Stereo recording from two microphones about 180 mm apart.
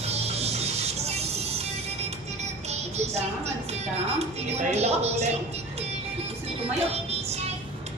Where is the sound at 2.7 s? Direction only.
35° right (ahead or behind).